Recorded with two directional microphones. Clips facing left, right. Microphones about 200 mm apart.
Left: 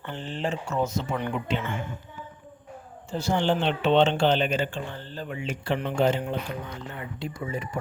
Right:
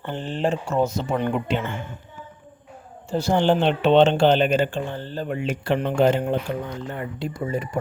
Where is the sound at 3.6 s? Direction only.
70° right (ahead or behind).